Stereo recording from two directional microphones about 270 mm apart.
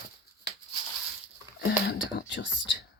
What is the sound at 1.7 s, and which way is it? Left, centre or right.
Whispering, left.